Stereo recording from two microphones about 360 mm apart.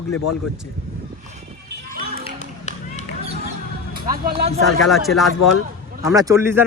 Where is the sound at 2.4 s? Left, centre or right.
Centre.